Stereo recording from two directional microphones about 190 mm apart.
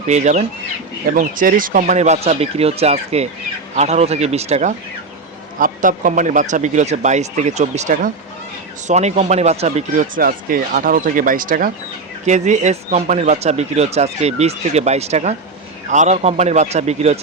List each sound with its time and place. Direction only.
0.1 s speech: 40° right (ahead or behind)
5.5 s speech: 45° right (ahead or behind)